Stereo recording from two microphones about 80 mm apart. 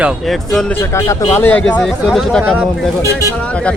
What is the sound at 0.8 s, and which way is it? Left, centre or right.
Speech, left.